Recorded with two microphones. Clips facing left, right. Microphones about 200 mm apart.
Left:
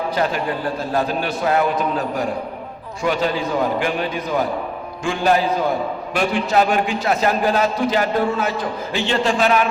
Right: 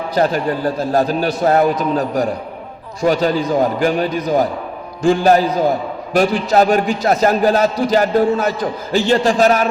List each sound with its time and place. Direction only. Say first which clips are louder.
0.2 s a man's voice: right 8 dB; 40° right (ahead or behind)